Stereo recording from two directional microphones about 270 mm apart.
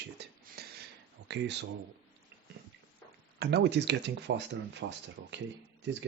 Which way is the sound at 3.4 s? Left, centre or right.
Right.